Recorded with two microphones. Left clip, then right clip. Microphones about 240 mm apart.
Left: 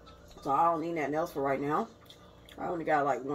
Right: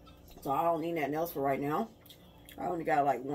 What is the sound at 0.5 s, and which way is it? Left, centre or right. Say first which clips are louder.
Speech: left 3 dB; right.